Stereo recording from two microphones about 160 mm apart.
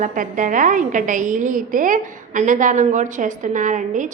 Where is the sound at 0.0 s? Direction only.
55° right (ahead or behind).